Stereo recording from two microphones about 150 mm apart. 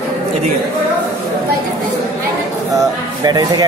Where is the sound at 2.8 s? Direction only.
25° right (ahead or behind).